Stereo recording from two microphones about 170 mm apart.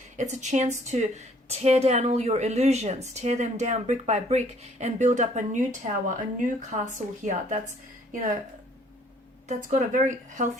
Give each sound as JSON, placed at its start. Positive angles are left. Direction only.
{"t": 0.2, "sound": "a woman's voice", "side_deg": -45}
{"t": 9.6, "sound": "a woman's voice", "side_deg": -45}